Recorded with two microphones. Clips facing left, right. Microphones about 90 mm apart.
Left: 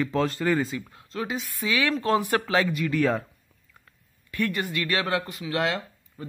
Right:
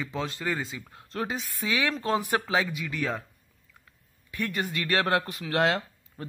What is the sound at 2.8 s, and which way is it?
Speech, centre (ahead or behind).